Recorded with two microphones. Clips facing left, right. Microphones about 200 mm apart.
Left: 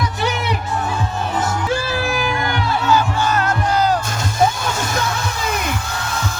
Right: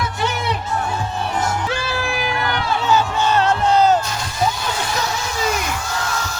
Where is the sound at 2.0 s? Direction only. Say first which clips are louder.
Left 3 dB; 45° left (ahead or behind).